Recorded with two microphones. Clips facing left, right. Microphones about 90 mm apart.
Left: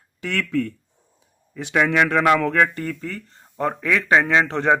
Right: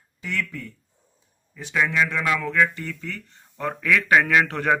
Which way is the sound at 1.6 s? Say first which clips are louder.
Left 4 dB; 70° left (ahead or behind).